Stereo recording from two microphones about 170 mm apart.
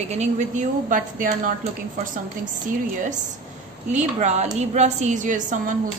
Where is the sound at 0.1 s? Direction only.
45° right (ahead or behind).